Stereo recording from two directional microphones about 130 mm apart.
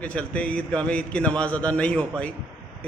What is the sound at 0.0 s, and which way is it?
A man's voice, 10° left (ahead or behind).